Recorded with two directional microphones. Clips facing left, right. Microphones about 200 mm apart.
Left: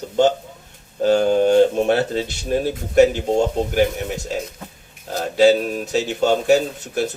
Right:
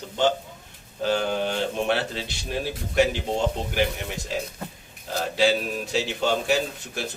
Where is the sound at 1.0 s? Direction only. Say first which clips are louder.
Left 9 dB; 45° left (ahead or behind).